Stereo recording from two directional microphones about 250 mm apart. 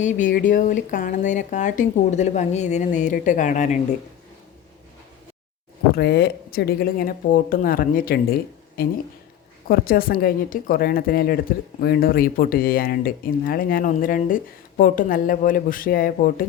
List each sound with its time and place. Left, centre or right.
0.0 s speech: left
6.0 s speech: left